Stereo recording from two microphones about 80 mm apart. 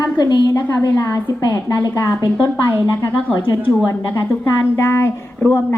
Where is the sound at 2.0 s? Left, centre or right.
Left.